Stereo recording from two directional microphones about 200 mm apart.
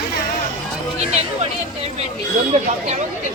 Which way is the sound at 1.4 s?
30° right (ahead or behind).